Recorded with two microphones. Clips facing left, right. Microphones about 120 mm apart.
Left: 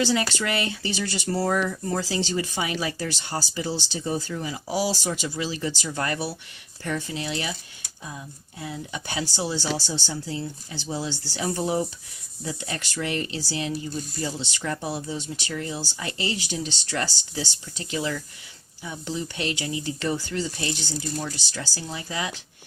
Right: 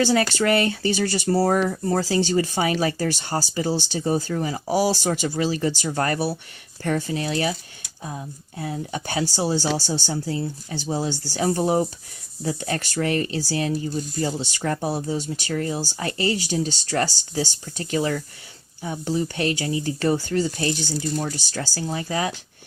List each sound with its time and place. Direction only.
0.0 s speech: 45° right (ahead or behind)